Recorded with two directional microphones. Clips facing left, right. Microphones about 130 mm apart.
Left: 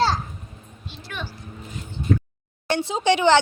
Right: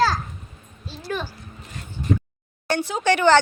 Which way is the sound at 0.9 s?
35° right (ahead or behind).